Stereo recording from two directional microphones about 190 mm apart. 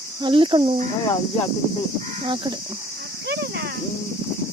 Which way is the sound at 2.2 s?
25° right (ahead or behind).